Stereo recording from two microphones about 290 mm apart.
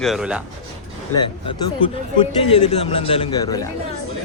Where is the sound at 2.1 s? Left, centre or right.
Centre.